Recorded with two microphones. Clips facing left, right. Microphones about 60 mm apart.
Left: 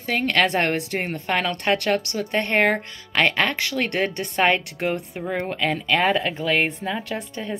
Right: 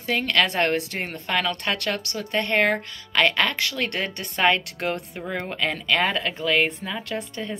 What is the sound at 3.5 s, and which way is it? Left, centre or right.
Speech, centre.